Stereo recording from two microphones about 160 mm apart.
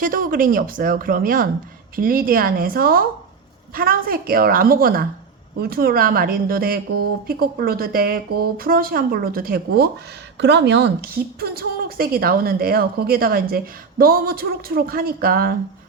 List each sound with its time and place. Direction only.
0.0 s a woman's voice: 60° right (ahead or behind)
10.3 s a woman's voice: 90° right; by 15.5 s 65° right (ahead or behind)